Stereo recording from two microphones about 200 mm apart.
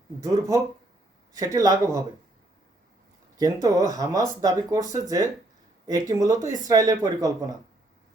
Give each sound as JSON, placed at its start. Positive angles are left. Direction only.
{"t": 0.3, "sound": "speech", "side_deg": -15}
{"t": 3.3, "sound": "speech", "side_deg": -15}